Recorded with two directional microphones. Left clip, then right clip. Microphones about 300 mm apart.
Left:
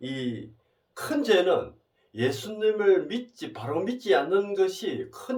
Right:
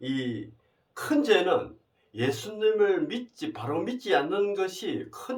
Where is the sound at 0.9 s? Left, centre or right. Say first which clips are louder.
Even; centre.